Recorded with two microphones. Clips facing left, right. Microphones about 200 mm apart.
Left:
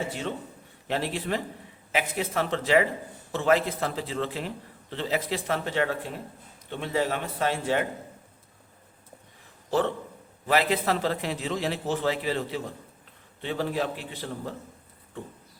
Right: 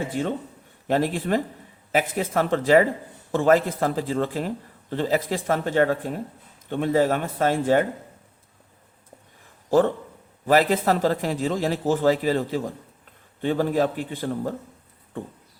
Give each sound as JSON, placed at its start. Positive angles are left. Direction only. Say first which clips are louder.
{"t": 0.1, "sound": "a man's voice", "louder": "right 6 dB", "side_deg": -50}
{"t": 9.6, "sound": "a man's voice", "louder": "right 7 dB", "side_deg": -45}